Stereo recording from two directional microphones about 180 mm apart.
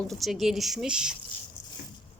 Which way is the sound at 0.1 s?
Centre (ahead or behind).